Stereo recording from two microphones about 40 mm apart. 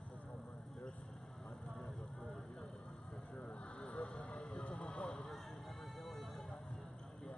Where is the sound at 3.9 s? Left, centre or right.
Left.